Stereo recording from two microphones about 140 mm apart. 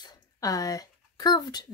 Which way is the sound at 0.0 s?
25° left (ahead or behind).